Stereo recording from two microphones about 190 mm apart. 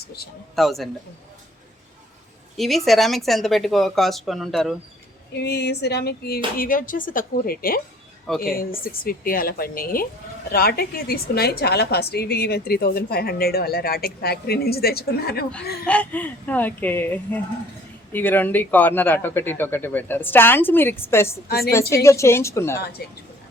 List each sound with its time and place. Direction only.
0.5 s speech: centre (ahead or behind)
2.6 s speech: centre (ahead or behind)
5.3 s a woman's voice: 60° left (ahead or behind)
6.6 s a woman's voice: 45° left (ahead or behind)
15.9 s speech: 5° left (ahead or behind)
22.8 s a woman's voice: 55° left (ahead or behind)